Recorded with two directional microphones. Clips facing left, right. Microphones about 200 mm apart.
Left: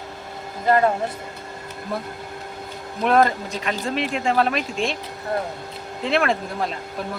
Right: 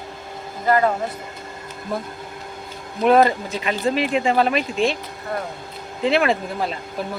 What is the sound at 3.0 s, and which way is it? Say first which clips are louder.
Speech: right 3 dB; 5° right (ahead or behind).